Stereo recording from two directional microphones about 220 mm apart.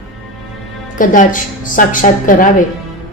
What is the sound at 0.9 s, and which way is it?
A woman's voice, 35° left (ahead or behind).